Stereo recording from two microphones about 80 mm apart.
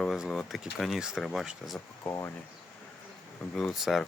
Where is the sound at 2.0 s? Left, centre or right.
Left.